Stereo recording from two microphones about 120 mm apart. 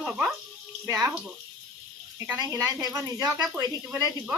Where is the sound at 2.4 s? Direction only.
30° right (ahead or behind).